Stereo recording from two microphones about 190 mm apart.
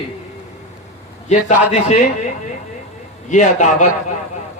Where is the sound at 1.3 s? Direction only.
35° left (ahead or behind).